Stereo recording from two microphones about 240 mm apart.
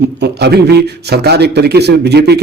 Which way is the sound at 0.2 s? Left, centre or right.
Right.